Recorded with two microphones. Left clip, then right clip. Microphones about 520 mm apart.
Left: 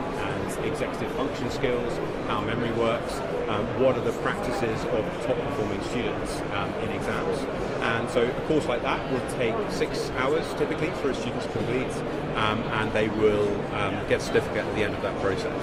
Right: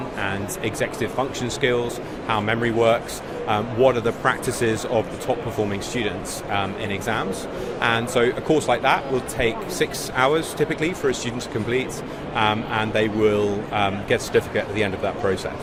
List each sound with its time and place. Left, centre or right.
2.3 s speech: right
7.8 s speech: right
12.4 s speech: right